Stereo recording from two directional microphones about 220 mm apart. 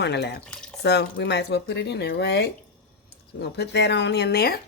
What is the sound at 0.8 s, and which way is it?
Speech, 50° left (ahead or behind).